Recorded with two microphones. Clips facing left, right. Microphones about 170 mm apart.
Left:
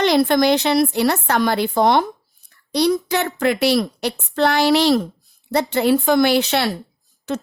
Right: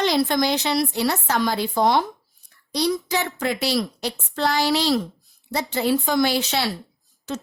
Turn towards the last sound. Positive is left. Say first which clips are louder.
# left 5 dB
turn(degrees=60)  # may be behind; listen again after turning